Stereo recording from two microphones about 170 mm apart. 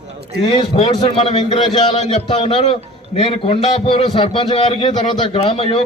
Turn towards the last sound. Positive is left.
turn(degrees=35)  # may be behind; listen again after turning